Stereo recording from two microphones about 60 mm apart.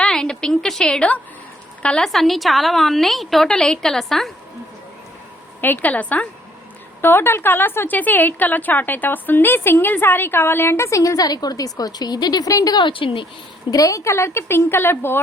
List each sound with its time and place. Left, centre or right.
0.0 s a sound: centre
1.8 s a woman's voice: centre
2.0 s a woman's voice: centre
5.5 s a woman's voice: left
7.0 s a woman's voice: left